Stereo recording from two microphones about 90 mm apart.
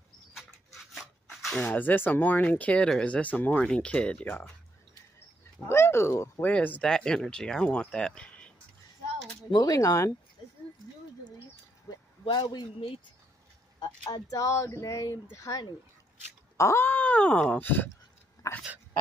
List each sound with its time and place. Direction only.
0.9 s a sound: centre (ahead or behind)
1.6 s speech: 15° left (ahead or behind)
5.7 s speech: 30° left (ahead or behind)
6.4 s speech: 20° left (ahead or behind)
6.8 s speech: 5° left (ahead or behind)
9.5 s speech: 45° left (ahead or behind)
11.9 s speech: 55° left (ahead or behind)
13.7 s speech: 40° left (ahead or behind)
16.5 s speech: 30° left (ahead or behind)
18.4 s dog: 35° left (ahead or behind)